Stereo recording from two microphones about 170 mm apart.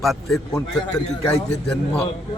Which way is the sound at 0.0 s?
Centre (ahead or behind).